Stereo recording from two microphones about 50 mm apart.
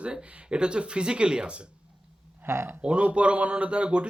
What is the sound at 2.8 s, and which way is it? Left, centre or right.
Speech, right.